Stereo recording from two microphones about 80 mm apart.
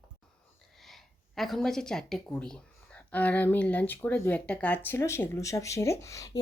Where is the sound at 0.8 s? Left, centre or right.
Centre.